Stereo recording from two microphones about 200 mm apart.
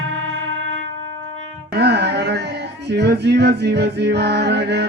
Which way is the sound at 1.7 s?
55° right (ahead or behind).